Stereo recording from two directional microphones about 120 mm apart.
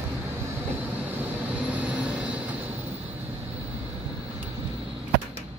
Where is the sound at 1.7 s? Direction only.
10° right (ahead or behind).